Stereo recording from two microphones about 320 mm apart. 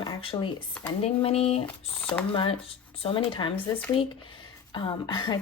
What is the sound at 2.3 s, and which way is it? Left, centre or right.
A woman's voice, centre.